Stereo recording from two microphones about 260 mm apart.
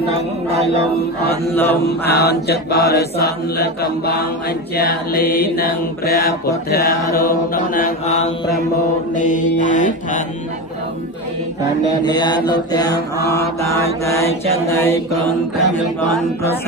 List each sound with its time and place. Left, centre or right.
1.5 s mantra: centre
2.0 s mantra: left
5.2 s mantra: centre
5.6 s mantra: left
12.0 s mantra: centre